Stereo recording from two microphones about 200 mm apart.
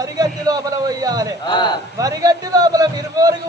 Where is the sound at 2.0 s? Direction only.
20° right (ahead or behind).